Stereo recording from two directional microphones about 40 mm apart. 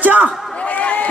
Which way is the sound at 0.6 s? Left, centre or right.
Left.